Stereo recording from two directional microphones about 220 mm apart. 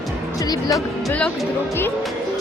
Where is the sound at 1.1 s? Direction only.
5° left (ahead or behind).